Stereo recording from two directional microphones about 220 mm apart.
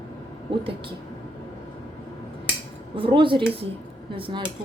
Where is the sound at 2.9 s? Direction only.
25° right (ahead or behind).